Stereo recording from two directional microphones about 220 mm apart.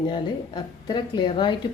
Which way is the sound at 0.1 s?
20° left (ahead or behind).